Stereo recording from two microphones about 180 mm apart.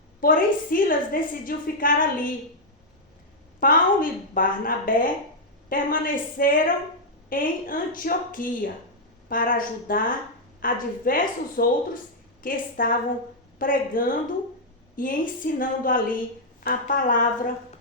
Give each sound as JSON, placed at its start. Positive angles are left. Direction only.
{"t": 0.2, "sound": "a woman's voice", "side_deg": 50}
{"t": 3.6, "sound": "a woman's voice", "side_deg": 50}